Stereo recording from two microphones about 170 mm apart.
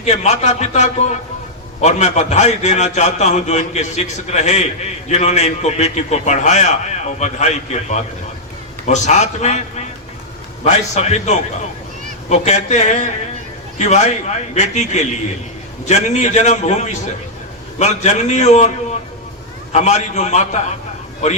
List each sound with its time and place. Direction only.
0.0 s a man's voice: 40° left (ahead or behind)